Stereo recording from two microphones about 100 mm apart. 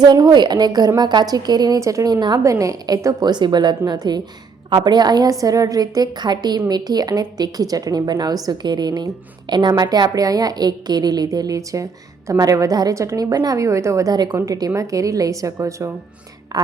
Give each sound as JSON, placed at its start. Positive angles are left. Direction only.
{"t": 0.0, "sound": "a woman's voice", "side_deg": -40}
{"t": 16.5, "sound": "speech", "side_deg": -40}